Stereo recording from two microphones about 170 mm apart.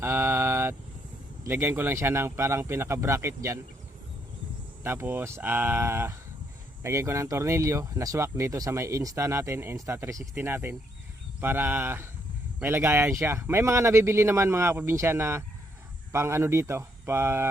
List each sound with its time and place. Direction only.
0.0 s mantra: 15° right (ahead or behind)
1.5 s speech: 10° right (ahead or behind)
4.8 s speech: 15° right (ahead or behind)